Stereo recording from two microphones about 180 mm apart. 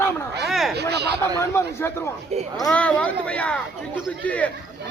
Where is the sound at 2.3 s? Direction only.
35° right (ahead or behind).